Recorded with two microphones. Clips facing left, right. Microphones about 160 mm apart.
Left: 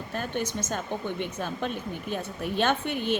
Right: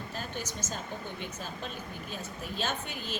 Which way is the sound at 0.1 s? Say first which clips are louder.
Left 11 dB; 60° left (ahead or behind).